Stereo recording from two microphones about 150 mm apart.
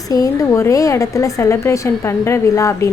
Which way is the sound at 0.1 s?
25° left (ahead or behind).